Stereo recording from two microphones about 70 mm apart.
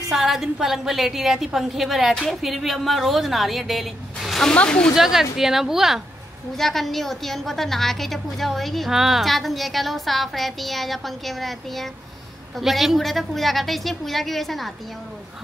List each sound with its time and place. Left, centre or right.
0.1 s a woman's voice: centre
4.5 s speech: centre
4.9 s a woman's voice: centre
6.5 s a woman's voice: centre